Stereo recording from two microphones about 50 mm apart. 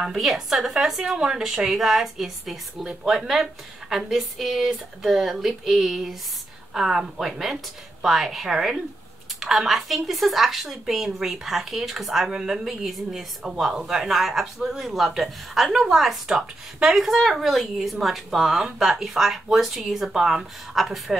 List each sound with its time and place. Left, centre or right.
0.0 s a woman's voice: centre
1.1 s a woman's voice: right
1.4 s a woman's voice: centre